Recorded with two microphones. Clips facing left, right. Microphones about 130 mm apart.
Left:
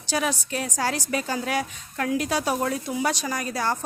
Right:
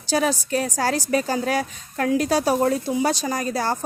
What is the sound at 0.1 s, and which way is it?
A woman's voice, 35° right (ahead or behind).